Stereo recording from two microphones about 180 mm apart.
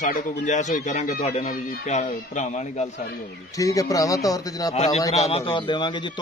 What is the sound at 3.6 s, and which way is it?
A man's voice, 20° left (ahead or behind).